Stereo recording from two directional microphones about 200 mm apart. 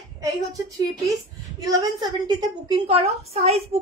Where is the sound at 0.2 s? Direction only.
15° right (ahead or behind).